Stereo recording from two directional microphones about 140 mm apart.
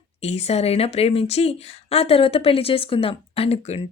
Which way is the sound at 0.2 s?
50° left (ahead or behind).